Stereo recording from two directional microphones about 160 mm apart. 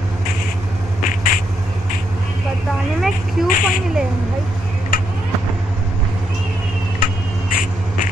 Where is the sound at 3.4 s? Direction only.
60° left (ahead or behind).